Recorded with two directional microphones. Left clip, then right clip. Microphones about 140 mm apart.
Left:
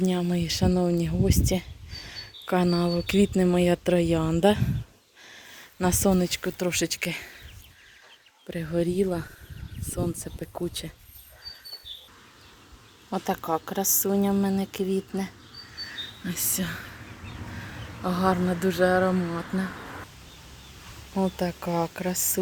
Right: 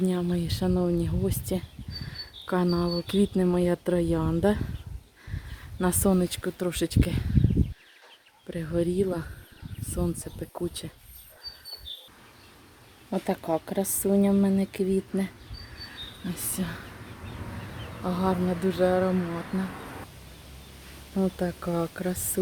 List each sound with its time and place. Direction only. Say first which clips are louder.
0.0 s speech: left 1 dB; centre (ahead or behind)
5.8 s speech: left 1 dB; 5° right (ahead or behind)
8.4 s speech: left 1 dB; 5° left (ahead or behind)
13.1 s speech: left 1 dB; 10° right (ahead or behind)
16.2 s speech: left 4 dB; 10° left (ahead or behind)
18.0 s speech: left 3 dB; 20° left (ahead or behind)
21.2 s speech: left 1 dB; 5° right (ahead or behind)